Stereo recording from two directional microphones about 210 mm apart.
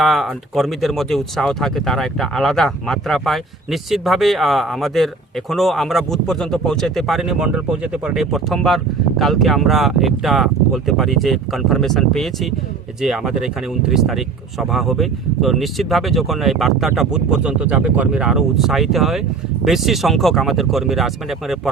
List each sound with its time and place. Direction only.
0.0 s speech: centre (ahead or behind)